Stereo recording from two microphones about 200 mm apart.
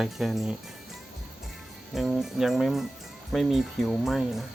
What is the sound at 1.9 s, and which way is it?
Speech, centre (ahead or behind).